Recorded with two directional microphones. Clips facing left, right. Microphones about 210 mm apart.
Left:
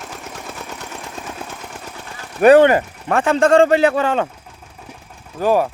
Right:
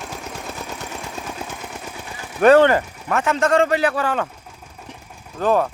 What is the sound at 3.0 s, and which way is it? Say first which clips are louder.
A man's voice: left 5 dB; 30° left (ahead or behind).